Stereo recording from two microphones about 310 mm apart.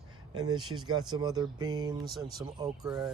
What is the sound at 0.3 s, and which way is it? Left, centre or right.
Speech, centre.